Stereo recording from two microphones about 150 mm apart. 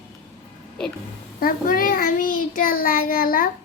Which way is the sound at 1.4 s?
70° left (ahead or behind).